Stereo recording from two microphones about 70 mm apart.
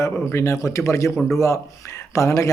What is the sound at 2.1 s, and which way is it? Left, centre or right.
Speech, left.